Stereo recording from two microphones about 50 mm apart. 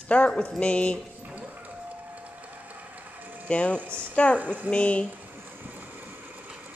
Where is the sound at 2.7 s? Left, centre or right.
Right.